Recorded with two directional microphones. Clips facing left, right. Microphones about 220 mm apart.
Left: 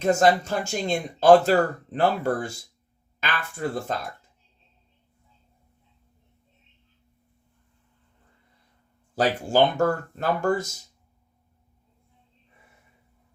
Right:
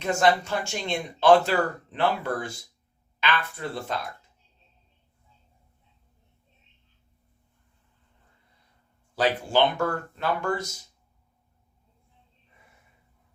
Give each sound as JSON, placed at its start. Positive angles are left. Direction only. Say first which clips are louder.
{"t": 0.0, "sound": "speech", "louder": "left 3 dB", "side_deg": 40}
{"t": 9.1, "sound": "speech", "louder": "left 2 dB", "side_deg": 45}